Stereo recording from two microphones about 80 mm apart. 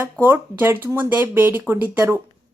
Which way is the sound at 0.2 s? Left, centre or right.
Right.